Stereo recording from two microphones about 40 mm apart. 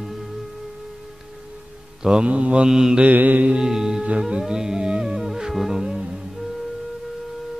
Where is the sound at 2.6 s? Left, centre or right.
Centre.